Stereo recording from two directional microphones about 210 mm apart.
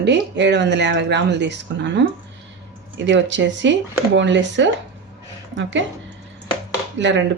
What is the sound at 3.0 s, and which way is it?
Speech, 60° right (ahead or behind).